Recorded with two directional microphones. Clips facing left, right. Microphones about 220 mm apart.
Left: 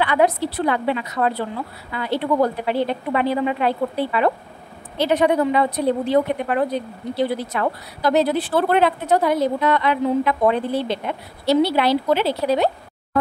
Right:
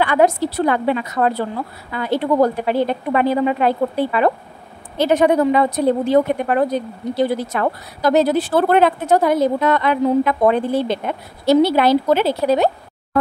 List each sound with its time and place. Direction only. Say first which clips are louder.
0.0 s a woman's voice: right 3 dB; 45° right (ahead or behind)